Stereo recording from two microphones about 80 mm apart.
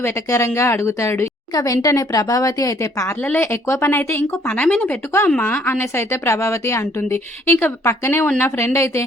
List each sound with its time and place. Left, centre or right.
0.0 s a woman's voice: left
3.2 s a woman's voice: left